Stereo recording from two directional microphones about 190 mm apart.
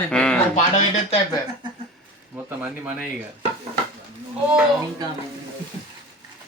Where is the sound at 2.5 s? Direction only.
10° right (ahead or behind).